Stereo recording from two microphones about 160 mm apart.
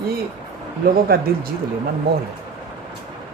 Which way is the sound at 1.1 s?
70° right (ahead or behind).